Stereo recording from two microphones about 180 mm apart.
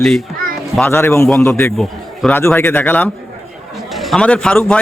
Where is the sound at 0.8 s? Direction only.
10° left (ahead or behind).